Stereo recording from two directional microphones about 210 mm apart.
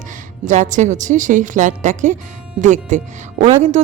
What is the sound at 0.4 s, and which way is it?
A woman's voice, 35° right (ahead or behind).